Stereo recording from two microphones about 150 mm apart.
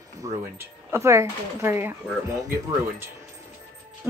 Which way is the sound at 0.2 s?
25° right (ahead or behind).